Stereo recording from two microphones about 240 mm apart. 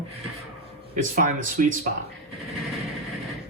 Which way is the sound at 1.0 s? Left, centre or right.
Right.